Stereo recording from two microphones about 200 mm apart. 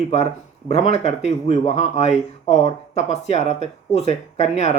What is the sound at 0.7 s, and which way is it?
A man's voice, 35° left (ahead or behind).